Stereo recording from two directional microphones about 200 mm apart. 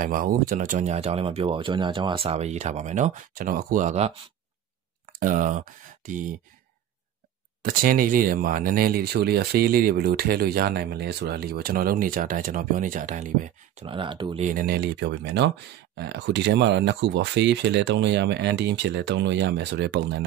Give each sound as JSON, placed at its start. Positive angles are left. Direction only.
{"t": 0.0, "sound": "speech", "side_deg": -45}
{"t": 5.2, "sound": "speech", "side_deg": -40}
{"t": 7.6, "sound": "speech", "side_deg": -45}
{"t": 13.8, "sound": "speech", "side_deg": -25}
{"t": 14.4, "sound": "speech", "side_deg": -45}